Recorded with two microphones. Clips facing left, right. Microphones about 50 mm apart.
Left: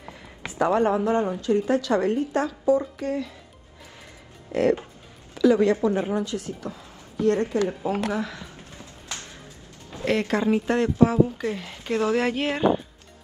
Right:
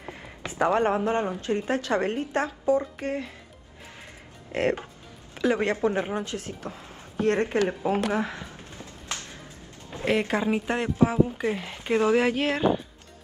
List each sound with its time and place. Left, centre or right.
0.5 s a woman's voice: right
4.5 s a woman's voice: right
10.0 s speech: centre
12.2 s speech: centre